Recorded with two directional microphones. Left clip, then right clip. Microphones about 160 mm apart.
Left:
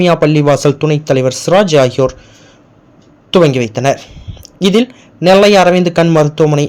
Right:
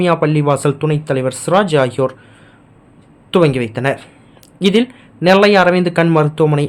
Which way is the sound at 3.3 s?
20° left (ahead or behind).